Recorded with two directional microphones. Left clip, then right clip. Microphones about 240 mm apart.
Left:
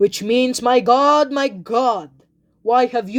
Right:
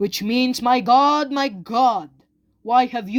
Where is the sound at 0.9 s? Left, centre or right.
Right.